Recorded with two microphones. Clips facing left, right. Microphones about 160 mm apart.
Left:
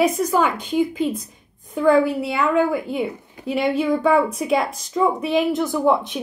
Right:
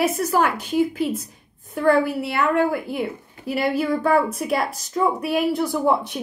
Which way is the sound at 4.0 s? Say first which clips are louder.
Left 2 dB; centre (ahead or behind).